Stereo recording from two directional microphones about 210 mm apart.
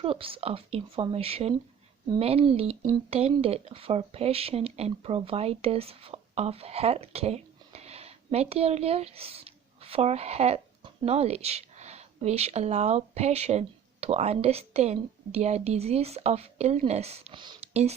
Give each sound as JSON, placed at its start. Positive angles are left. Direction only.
{"t": 0.0, "sound": "speech", "side_deg": -25}